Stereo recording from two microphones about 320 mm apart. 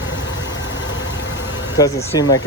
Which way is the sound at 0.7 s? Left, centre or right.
Left.